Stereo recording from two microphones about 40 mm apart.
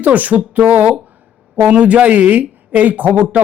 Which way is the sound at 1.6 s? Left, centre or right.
Right.